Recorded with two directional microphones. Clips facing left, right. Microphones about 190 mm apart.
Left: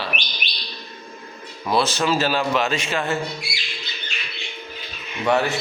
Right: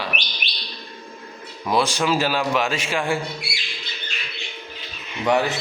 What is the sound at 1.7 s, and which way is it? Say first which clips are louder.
A man's voice: even; 15° right (ahead or behind).